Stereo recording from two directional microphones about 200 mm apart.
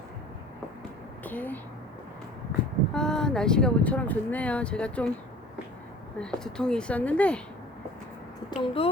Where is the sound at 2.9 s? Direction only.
5° left (ahead or behind).